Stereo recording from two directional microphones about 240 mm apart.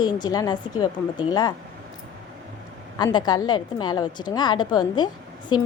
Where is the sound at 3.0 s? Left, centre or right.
Centre.